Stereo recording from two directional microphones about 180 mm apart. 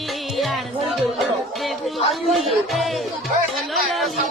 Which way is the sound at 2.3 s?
Centre (ahead or behind).